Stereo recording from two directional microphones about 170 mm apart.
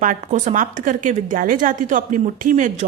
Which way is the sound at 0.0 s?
50° right (ahead or behind).